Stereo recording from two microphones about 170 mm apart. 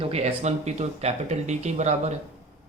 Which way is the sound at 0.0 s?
35° right (ahead or behind).